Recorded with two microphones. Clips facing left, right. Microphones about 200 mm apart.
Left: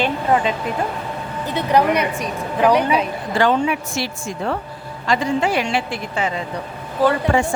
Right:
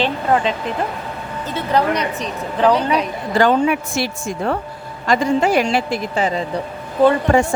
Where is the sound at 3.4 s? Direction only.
50° right (ahead or behind).